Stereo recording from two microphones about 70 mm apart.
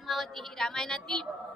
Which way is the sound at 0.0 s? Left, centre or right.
Centre.